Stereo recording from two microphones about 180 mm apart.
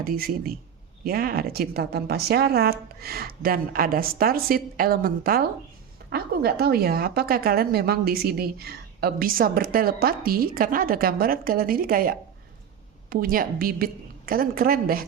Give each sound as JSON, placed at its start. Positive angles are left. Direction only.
{"t": 0.0, "sound": "a woman's voice", "side_deg": -55}